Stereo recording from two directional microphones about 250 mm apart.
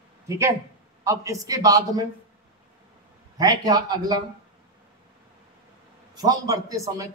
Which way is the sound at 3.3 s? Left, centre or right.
Centre.